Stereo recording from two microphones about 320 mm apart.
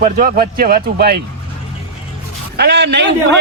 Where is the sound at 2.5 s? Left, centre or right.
Right.